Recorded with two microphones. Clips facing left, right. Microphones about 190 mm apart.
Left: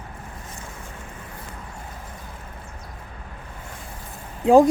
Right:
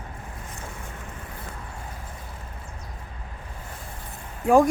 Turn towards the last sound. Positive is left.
turn(degrees=25)  # may be behind; listen again after turning